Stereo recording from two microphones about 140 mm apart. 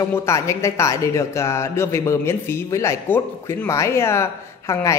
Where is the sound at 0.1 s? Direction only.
20° left (ahead or behind).